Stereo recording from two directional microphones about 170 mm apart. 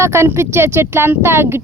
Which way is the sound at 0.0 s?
15° right (ahead or behind).